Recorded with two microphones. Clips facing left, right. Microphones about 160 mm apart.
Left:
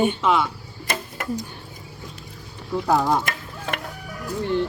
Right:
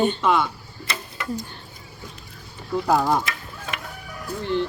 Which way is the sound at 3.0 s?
Centre (ahead or behind).